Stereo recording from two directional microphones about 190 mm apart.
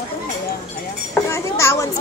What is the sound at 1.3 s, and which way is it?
Speech, 15° left (ahead or behind).